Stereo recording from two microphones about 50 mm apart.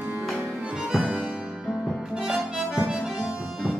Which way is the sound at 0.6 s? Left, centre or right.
Centre.